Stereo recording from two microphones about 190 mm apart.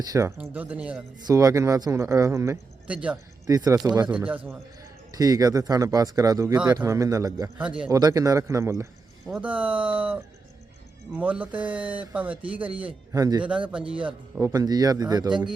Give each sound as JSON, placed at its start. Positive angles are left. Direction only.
{"t": 0.1, "sound": "speech", "side_deg": -15}
{"t": 1.3, "sound": "speech", "side_deg": -15}
{"t": 3.5, "sound": "speech", "side_deg": -20}
{"t": 4.0, "sound": "speech", "side_deg": -5}
{"t": 5.1, "sound": "speech", "side_deg": -20}
{"t": 7.6, "sound": "a man's voice", "side_deg": -5}
{"t": 7.9, "sound": "speech", "side_deg": -20}
{"t": 11.2, "sound": "speech", "side_deg": -5}
{"t": 14.5, "sound": "speech", "side_deg": -20}